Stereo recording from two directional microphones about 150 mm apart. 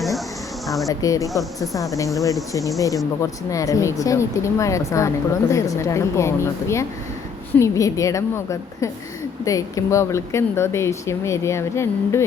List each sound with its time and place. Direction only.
0.9 s speech: 25° left (ahead or behind)
1.3 s speech: centre (ahead or behind)
2.5 s speech: 20° left (ahead or behind)